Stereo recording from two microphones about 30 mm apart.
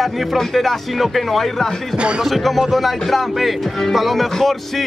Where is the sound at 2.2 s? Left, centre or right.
Centre.